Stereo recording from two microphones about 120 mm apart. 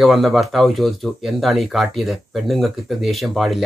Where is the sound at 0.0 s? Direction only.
Centre (ahead or behind).